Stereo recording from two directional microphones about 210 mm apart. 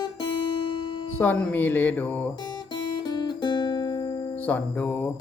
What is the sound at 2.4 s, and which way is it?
Guitar, 20° left (ahead or behind).